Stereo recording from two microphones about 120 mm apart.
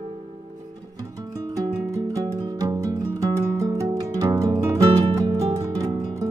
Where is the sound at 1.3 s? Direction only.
30° right (ahead or behind).